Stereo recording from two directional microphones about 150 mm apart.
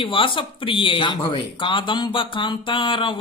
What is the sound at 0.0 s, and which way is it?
Speech, 35° left (ahead or behind).